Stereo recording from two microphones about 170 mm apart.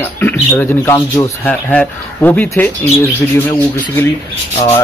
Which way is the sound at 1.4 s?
10° left (ahead or behind).